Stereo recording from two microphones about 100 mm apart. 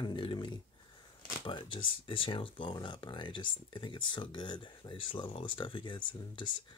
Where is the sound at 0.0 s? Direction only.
55° left (ahead or behind).